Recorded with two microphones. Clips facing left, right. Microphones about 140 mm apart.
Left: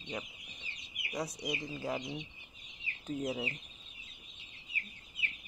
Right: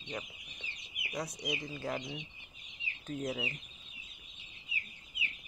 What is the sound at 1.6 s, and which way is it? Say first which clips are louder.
Speech: left 1 dB; 10° left (ahead or behind).